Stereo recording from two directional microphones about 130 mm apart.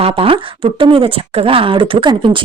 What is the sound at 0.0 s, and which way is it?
Speech, 45° right (ahead or behind).